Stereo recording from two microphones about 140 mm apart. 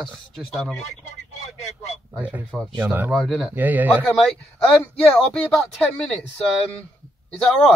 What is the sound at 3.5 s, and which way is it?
Speech, 10° right (ahead or behind).